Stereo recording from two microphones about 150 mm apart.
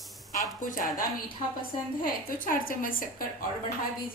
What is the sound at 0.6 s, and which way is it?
Speech, 65° left (ahead or behind).